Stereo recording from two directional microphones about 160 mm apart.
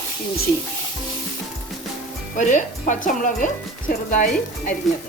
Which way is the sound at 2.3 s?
50° left (ahead or behind).